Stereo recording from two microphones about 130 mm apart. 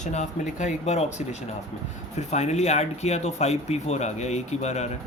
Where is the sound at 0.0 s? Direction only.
65° left (ahead or behind).